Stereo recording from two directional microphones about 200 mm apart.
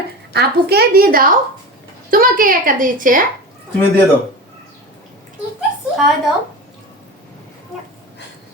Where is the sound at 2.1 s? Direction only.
45° right (ahead or behind).